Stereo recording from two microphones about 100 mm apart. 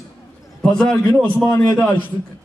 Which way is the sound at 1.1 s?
20° left (ahead or behind).